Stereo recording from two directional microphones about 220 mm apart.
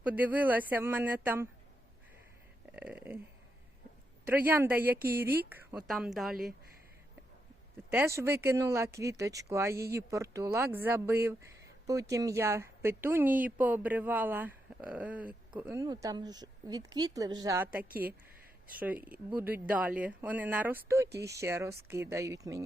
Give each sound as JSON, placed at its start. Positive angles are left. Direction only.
{"t": 0.0, "sound": "speech", "side_deg": -5}
{"t": 2.7, "sound": "speech", "side_deg": -5}
{"t": 4.3, "sound": "speech", "side_deg": -10}
{"t": 7.9, "sound": "speech", "side_deg": -10}